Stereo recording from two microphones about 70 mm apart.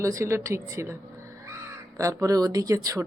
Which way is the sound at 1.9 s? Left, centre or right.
Right.